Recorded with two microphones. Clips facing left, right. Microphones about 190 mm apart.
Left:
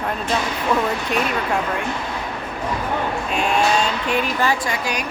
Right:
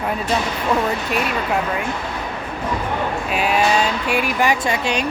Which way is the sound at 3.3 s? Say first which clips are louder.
Right 1 dB; 5° right (ahead or behind).